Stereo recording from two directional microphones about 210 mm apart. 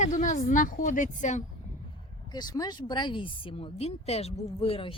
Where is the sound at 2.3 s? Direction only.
20° left (ahead or behind).